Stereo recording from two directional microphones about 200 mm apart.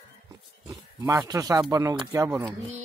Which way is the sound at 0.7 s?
20° right (ahead or behind).